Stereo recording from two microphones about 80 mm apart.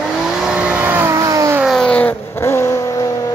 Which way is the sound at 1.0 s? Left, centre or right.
Right.